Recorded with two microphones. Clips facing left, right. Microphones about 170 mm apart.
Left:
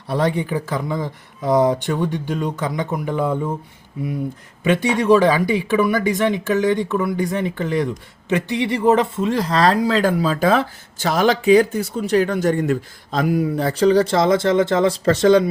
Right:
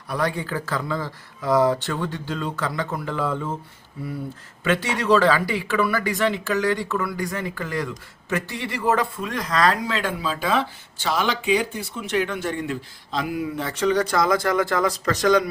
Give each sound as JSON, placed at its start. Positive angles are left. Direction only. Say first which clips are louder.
{"t": 0.1, "sound": "speech", "louder": "left 5 dB", "side_deg": 25}
{"t": 4.6, "sound": "speech", "louder": "left 5 dB", "side_deg": 20}